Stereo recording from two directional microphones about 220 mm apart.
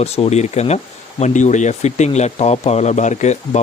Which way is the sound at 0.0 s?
30° left (ahead or behind).